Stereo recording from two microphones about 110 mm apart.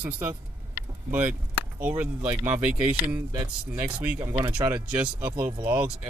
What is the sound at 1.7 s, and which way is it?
Speech, 15° right (ahead or behind).